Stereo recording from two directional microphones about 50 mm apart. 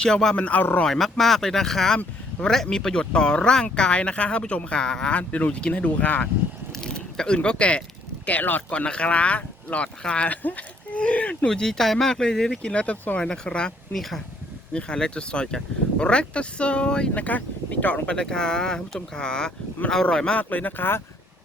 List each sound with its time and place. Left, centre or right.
0.0 s speech: centre
0.3 s speech: left
0.9 s speech: centre
5.1 s speech: left
6.7 s a sound: centre
8.3 s speech: left
8.7 s speech: left
11.4 s speech: centre
12.7 s speech: left
13.2 s speech: centre
13.9 s speech: centre
14.7 s speech: centre
17.2 s speech: left
20.4 s speech: left